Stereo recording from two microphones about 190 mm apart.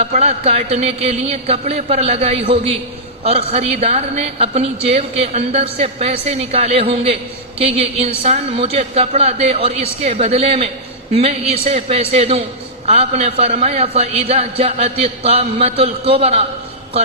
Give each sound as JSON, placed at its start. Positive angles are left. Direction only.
{"t": 0.0, "sound": "a woman's voice", "side_deg": -35}